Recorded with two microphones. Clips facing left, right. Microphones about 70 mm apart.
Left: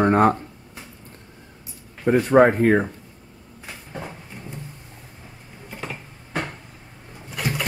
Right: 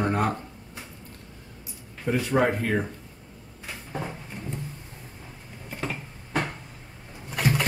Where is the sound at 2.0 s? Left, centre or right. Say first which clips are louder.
Left 8 dB; left.